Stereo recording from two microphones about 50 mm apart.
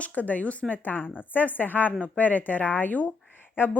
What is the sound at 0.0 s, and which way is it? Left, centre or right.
A woman's voice, left.